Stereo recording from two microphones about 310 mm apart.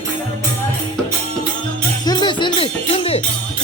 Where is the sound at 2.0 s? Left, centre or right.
Centre.